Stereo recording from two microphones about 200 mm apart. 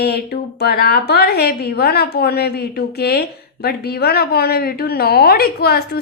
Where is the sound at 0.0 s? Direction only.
50° left (ahead or behind).